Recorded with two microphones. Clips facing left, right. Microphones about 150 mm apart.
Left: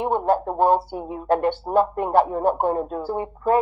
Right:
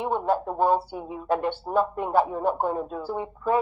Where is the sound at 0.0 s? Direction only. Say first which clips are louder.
Left 4 dB; 50° left (ahead or behind).